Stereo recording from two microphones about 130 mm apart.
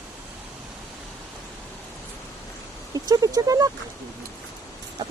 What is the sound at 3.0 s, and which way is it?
Speech, 30° right (ahead or behind).